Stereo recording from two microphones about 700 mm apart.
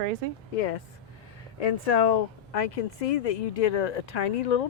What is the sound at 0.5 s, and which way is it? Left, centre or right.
Speech, left.